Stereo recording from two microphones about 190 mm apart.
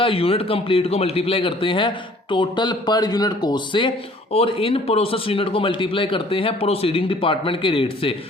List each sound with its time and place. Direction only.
0.0 s speech: 30° left (ahead or behind)